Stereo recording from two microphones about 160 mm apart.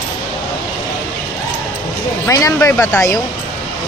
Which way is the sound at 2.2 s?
20° left (ahead or behind).